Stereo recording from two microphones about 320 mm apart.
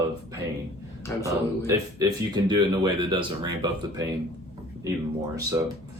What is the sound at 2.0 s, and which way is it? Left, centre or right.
Speech, centre.